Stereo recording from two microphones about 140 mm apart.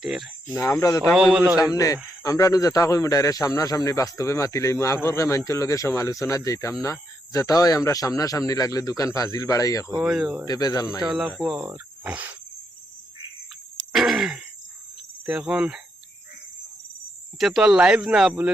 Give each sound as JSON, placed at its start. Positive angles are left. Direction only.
{"t": 0.0, "sound": "speech", "side_deg": 0}
{"t": 0.5, "sound": "speech", "side_deg": 20}
{"t": 1.1, "sound": "speech", "side_deg": -5}
{"t": 1.5, "sound": "speech", "side_deg": 25}
{"t": 10.0, "sound": "speech", "side_deg": -5}
{"t": 10.4, "sound": "speech", "side_deg": 25}
{"t": 11.0, "sound": "speech", "side_deg": -5}
{"t": 13.9, "sound": "a sound", "side_deg": -5}
{"t": 15.3, "sound": "speech", "side_deg": -5}
{"t": 17.3, "sound": "speech", "side_deg": 0}